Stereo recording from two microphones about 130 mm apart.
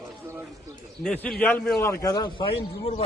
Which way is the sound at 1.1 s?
10° left (ahead or behind).